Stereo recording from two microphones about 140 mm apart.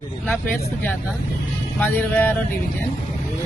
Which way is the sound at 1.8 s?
10° left (ahead or behind).